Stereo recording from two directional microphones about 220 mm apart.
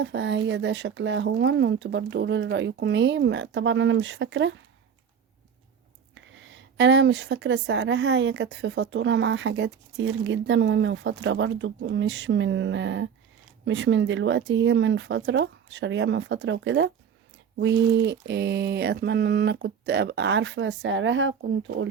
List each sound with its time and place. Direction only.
0.0 s speech: 55° right (ahead or behind)
6.1 s a woman's voice: 55° right (ahead or behind)